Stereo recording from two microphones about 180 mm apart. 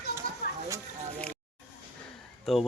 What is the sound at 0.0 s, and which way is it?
Children playing, 65° left (ahead or behind).